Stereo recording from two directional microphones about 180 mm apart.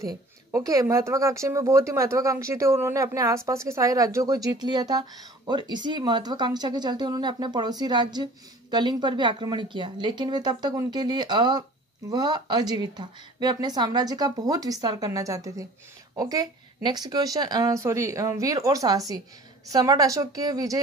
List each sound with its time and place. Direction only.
0.5 s speech: 15° right (ahead or behind)